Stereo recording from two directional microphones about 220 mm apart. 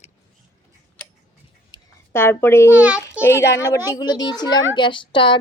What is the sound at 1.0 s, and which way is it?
Tick-tock, 5° left (ahead or behind).